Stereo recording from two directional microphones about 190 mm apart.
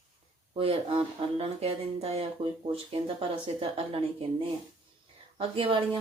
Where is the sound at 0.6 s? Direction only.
30° right (ahead or behind).